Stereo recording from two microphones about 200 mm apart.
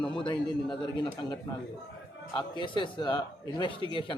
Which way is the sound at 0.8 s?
25° left (ahead or behind).